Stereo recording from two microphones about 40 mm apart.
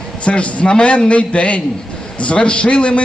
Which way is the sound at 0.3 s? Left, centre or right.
Left.